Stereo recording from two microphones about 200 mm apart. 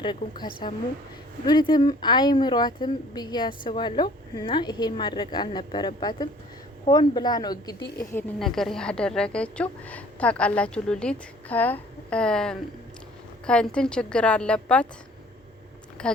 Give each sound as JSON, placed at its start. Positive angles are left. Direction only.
{"t": 0.0, "sound": "a woman's voice", "side_deg": 20}
{"t": 1.5, "sound": "a woman's voice", "side_deg": 20}
{"t": 7.8, "sound": "a woman's voice", "side_deg": 55}
{"t": 8.1, "sound": "a woman's voice", "side_deg": 0}
{"t": 16.0, "sound": "speech", "side_deg": 5}